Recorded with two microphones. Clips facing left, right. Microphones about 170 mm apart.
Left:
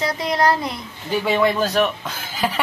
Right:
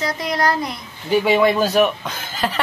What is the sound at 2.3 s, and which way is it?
Snicker, 10° left (ahead or behind).